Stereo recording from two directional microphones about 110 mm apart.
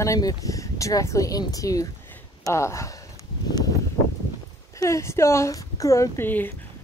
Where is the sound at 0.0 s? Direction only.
30° left (ahead or behind).